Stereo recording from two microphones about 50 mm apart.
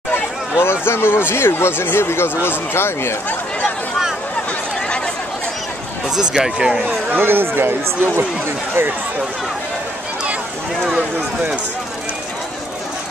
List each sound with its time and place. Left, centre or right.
0.1 s speech: left
4.8 s a sound: left
6.0 s speech: centre
7.2 s speech: right